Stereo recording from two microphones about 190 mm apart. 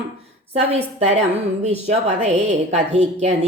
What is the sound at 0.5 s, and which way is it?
Speech, 35° right (ahead or behind).